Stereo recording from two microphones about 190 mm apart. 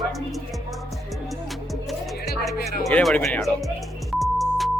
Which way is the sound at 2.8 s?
5° left (ahead or behind).